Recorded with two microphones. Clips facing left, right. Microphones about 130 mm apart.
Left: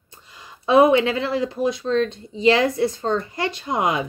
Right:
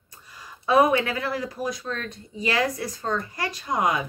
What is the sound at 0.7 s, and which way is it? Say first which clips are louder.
Speech: left 5 dB; 20° left (ahead or behind).